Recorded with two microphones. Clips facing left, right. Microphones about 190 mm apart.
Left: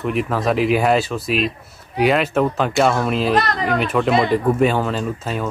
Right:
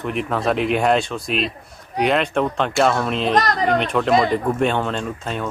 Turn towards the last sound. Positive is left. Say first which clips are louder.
# left 2 dB
turn(degrees=5)  # may be behind; listen again after turning